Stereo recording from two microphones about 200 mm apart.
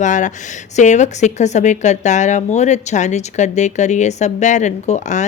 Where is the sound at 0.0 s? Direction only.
40° left (ahead or behind).